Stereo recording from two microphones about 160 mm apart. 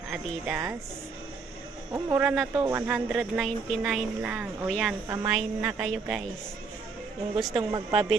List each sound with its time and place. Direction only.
0.4 s speech: 5° right (ahead or behind)
1.9 s speech: 20° right (ahead or behind)
2.2 s speech: centre (ahead or behind)
2.6 s speech: 15° right (ahead or behind)
7.3 s speech: centre (ahead or behind)
7.7 s speech: 25° right (ahead or behind)